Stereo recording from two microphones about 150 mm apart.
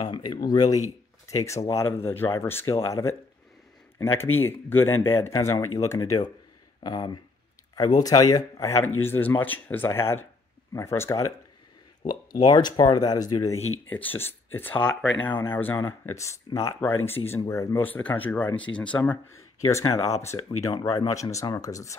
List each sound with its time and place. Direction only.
0.0 s speech: 30° left (ahead or behind)
4.2 s speech: 15° left (ahead or behind)
12.4 s speech: 30° left (ahead or behind)
13.8 s speech: 10° left (ahead or behind)
19.6 s speech: 20° left (ahead or behind)